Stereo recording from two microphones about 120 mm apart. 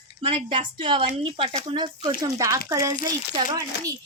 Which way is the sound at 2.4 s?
30° right (ahead or behind).